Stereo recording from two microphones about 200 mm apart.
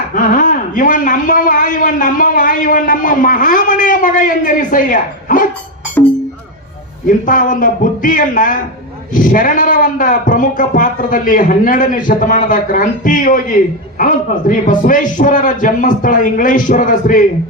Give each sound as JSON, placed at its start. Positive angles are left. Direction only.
{"t": 0.1, "sound": "a man's voice", "side_deg": 45}
{"t": 7.3, "sound": "a man's voice", "side_deg": 45}